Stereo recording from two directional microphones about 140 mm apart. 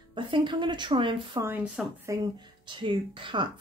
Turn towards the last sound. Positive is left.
turn(degrees=-35)  # may be behind; listen again after turning